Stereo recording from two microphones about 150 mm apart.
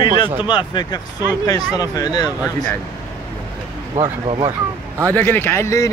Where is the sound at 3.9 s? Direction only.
35° right (ahead or behind).